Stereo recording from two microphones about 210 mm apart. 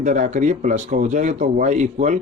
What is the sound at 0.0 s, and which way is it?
Speech, 35° right (ahead or behind).